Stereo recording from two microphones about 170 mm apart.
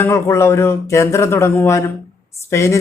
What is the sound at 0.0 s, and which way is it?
Speech, 15° left (ahead or behind).